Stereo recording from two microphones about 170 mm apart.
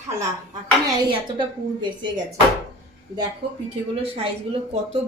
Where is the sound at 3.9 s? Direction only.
35° right (ahead or behind).